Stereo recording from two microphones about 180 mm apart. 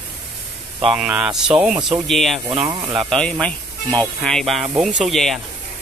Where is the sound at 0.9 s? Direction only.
5° right (ahead or behind).